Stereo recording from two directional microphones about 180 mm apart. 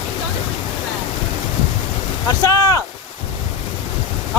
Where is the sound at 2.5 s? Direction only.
20° left (ahead or behind).